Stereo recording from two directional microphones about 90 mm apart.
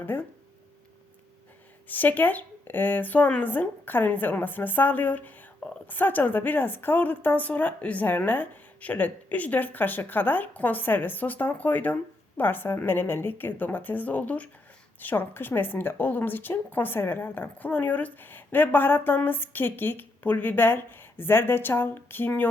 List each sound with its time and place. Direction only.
0.0 s speech: 20° left (ahead or behind)
1.9 s a woman's voice: 20° left (ahead or behind)